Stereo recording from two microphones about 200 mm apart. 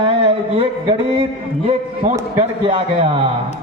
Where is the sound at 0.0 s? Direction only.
30° right (ahead or behind).